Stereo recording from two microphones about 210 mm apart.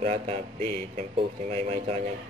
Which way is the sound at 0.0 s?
30° right (ahead or behind).